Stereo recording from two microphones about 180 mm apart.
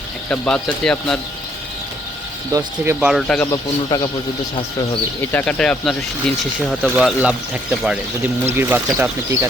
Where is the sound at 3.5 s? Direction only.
20° left (ahead or behind).